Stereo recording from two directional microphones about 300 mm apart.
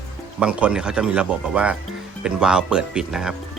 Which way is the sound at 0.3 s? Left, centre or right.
Centre.